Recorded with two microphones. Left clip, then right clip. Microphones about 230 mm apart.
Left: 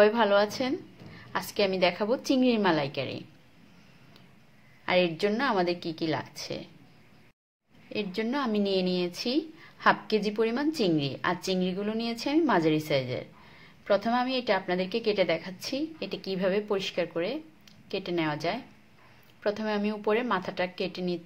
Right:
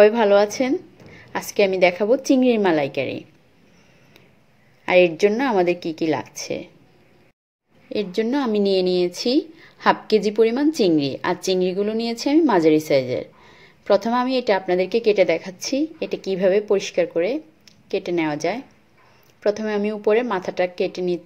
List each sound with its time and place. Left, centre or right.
0.0 s a woman's voice: centre
4.8 s a woman's voice: centre
8.2 s a woman's voice: centre